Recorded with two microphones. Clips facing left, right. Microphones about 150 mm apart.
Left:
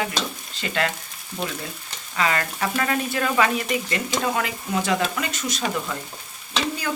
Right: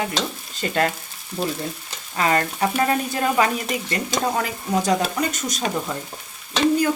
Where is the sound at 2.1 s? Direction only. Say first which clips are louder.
Right 3 dB; 35° right (ahead or behind).